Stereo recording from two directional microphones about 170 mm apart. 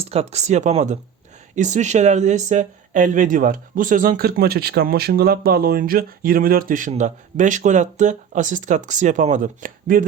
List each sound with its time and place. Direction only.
0.0 s speech: 35° right (ahead or behind); by 10.1 s 55° right (ahead or behind)